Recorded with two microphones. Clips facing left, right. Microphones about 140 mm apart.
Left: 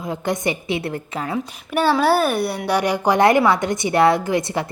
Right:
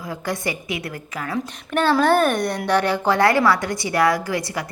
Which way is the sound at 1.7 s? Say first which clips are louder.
Even; 10° left (ahead or behind).